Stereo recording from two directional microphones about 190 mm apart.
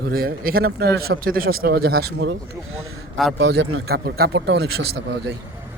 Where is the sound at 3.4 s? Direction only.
65° right (ahead or behind).